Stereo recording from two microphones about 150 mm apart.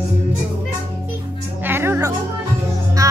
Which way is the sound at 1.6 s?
15° right (ahead or behind).